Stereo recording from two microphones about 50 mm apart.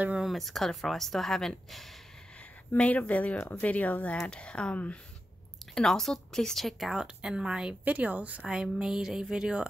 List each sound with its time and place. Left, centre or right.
0.2 s speech: centre
2.8 s speech: left
3.3 s speech: left
3.6 s speech: left
4.3 s speech: left
5.8 s speech: centre
6.8 s speech: centre
7.8 s speech: right
8.5 s speech: centre